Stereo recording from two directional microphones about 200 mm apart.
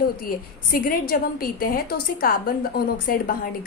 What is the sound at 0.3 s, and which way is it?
A woman's voice, 45° left (ahead or behind).